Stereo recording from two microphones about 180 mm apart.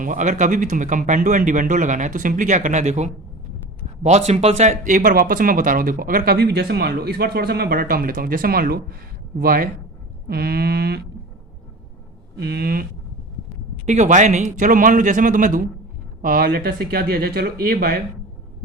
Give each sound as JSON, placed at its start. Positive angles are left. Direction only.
{"t": 0.0, "sound": "speech", "side_deg": -45}
{"t": 4.3, "sound": "speech", "side_deg": -35}
{"t": 12.4, "sound": "speech", "side_deg": -60}
{"t": 13.8, "sound": "speech", "side_deg": -40}